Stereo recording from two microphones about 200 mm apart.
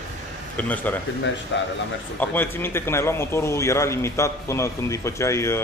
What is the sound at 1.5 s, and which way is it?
Speech, 60° left (ahead or behind).